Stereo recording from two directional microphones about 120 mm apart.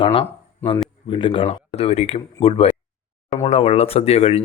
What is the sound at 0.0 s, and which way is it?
Speech, 45° left (ahead or behind).